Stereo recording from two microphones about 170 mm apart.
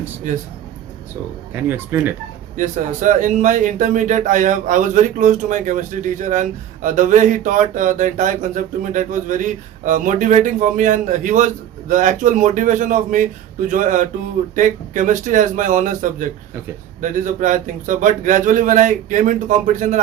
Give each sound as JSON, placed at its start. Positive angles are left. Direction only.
{"t": 0.3, "sound": "speech", "side_deg": -45}
{"t": 1.5, "sound": "speech", "side_deg": -10}
{"t": 2.6, "sound": "speech", "side_deg": -50}